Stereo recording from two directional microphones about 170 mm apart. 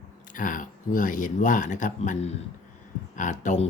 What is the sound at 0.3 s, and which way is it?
Speech, 50° left (ahead or behind).